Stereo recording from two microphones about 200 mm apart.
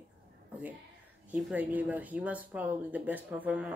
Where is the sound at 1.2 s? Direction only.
5° right (ahead or behind).